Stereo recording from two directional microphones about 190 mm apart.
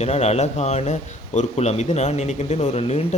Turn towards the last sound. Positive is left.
turn(degrees=35)  # may be behind; listen again after turning